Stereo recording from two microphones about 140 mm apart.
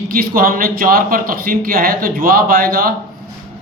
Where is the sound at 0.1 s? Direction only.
90° right.